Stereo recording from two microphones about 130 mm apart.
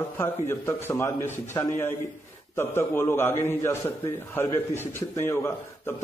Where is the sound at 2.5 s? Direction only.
20° left (ahead or behind).